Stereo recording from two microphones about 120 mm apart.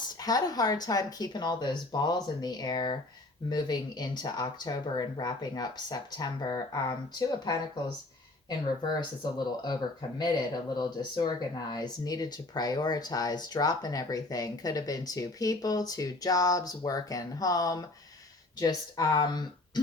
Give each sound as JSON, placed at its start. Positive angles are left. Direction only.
{"t": 0.2, "sound": "speech", "side_deg": 30}